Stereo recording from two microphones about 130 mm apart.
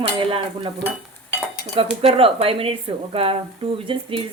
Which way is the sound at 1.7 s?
45° right (ahead or behind).